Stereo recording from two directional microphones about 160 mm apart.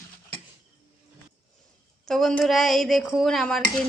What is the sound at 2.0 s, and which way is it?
Speech, 5° left (ahead or behind).